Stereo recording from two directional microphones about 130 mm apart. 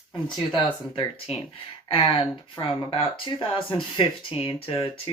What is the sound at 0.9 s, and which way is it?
Speech, 45° left (ahead or behind).